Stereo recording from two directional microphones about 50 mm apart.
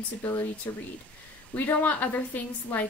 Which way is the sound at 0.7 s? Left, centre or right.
Left.